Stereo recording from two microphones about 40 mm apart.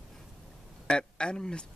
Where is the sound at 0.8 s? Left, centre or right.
Left.